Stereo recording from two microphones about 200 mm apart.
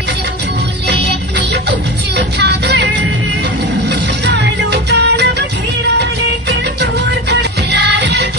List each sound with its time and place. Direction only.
2.1 s music: 55° right (ahead or behind)
4.3 s music: 55° right (ahead or behind)
6.8 s music: 60° right (ahead or behind)